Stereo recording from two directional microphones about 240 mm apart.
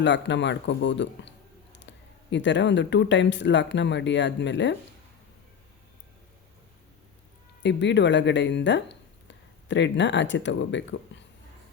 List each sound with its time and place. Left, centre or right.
0.0 s speech: left
7.6 s speech: left